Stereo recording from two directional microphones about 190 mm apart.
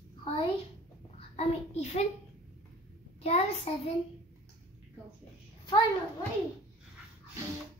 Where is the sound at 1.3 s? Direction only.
35° left (ahead or behind).